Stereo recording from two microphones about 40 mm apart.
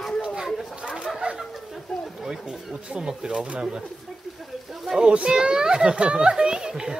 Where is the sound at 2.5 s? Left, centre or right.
Centre.